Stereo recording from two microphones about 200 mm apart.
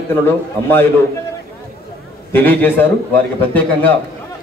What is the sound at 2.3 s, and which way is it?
Speech, 10° left (ahead or behind).